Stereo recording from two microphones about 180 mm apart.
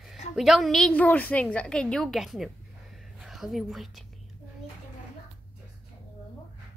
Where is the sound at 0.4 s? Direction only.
Centre (ahead or behind).